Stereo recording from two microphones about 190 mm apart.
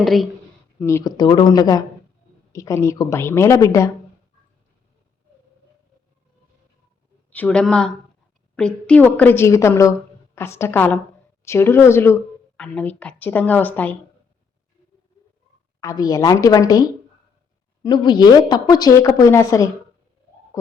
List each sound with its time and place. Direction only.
0.0 s speech: centre (ahead or behind)
0.8 s a woman's voice: 15° left (ahead or behind)
7.3 s speech: 5° left (ahead or behind)
15.8 s a woman's voice: 20° left (ahead or behind)
17.8 s a woman's voice: 25° left (ahead or behind)